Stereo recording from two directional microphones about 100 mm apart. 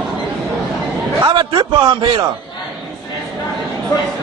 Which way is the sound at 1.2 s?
50° right (ahead or behind).